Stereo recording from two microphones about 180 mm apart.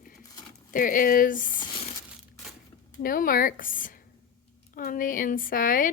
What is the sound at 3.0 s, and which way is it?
A woman's voice, 50° left (ahead or behind).